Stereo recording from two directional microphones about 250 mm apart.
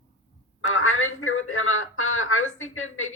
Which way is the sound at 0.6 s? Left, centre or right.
Left.